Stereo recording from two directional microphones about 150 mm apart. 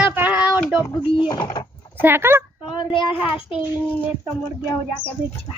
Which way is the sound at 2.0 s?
15° right (ahead or behind).